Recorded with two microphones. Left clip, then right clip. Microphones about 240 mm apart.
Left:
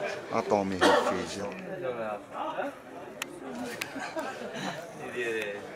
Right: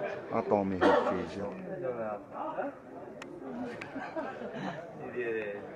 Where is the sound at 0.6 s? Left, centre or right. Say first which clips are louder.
Left 3 dB; centre.